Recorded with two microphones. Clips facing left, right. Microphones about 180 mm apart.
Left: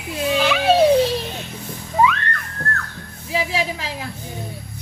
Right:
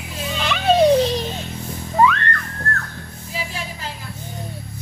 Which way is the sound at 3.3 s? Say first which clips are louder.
Left 8 dB; 75° left (ahead or behind).